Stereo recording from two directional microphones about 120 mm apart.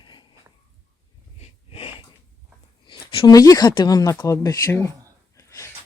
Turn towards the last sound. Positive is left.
turn(degrees=20)  # may be behind; listen again after turning